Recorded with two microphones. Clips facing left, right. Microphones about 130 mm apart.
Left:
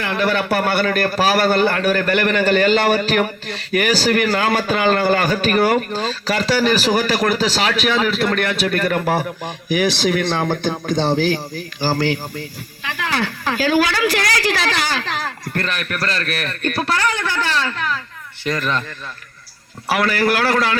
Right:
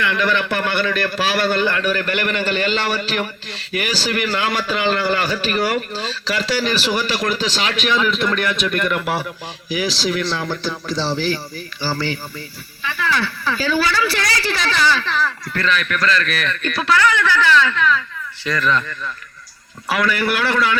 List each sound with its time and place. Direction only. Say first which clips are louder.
0.0 s a man's voice: even; 40° left (ahead or behind)
13.1 s speech: even; 40° left (ahead or behind)
18.4 s a man's voice: right 2 dB; 50° left (ahead or behind)
20.0 s speech: left 2 dB; 40° left (ahead or behind)